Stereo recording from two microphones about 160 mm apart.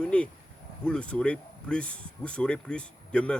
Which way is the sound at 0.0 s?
5° left (ahead or behind).